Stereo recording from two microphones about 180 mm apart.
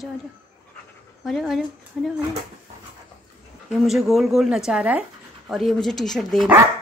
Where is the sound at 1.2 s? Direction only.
Centre (ahead or behind).